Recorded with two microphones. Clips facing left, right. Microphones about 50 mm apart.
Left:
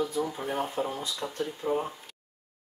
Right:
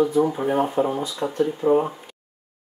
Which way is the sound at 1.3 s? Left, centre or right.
Right.